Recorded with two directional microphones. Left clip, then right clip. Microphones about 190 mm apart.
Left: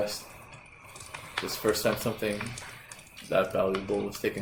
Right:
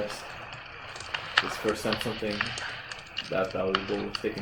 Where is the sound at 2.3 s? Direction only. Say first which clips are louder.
Right 7 dB; 25° right (ahead or behind).